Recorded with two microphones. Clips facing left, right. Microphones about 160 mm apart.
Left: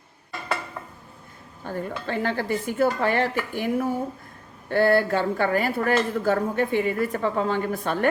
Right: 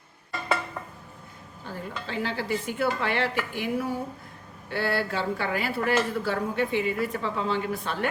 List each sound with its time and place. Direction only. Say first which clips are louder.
1.6 s speech: left 6 dB; 50° left (ahead or behind)